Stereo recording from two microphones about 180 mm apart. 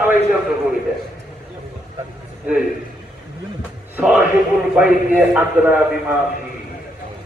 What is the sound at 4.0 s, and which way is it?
A man's voice, 10° right (ahead or behind).